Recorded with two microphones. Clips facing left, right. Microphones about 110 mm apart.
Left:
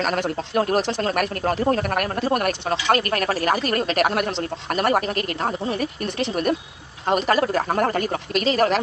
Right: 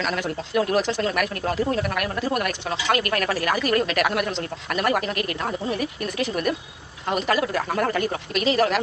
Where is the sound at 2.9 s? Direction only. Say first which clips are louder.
Even; 35° left (ahead or behind).